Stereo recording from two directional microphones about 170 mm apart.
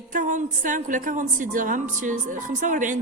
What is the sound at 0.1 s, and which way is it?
A woman's voice, 50° right (ahead or behind).